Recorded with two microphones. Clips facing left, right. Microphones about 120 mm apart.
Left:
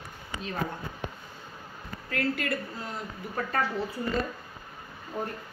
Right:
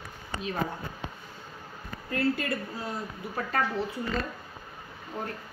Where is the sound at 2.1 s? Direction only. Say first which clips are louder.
Right 2 dB; 25° right (ahead or behind).